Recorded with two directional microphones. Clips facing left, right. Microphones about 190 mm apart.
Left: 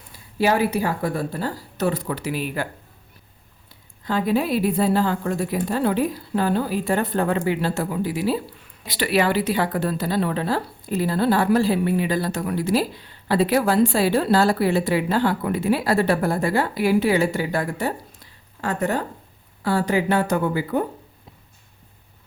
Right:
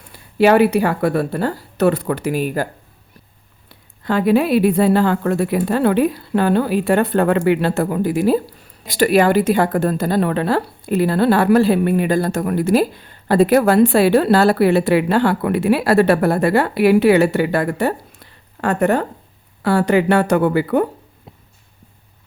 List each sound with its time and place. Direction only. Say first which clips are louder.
0.3 s a woman's voice: right 8 dB; 70° right (ahead or behind); by 2.6 s 45° right (ahead or behind)
3.7 s a woman's voice: right 5 dB; 65° right (ahead or behind)